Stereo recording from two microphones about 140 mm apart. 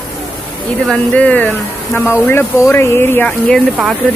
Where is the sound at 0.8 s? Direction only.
5° left (ahead or behind).